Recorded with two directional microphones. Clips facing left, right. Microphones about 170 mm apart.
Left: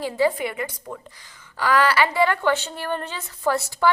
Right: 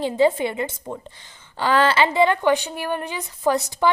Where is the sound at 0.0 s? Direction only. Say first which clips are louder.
Right 3 dB; 25° right (ahead or behind).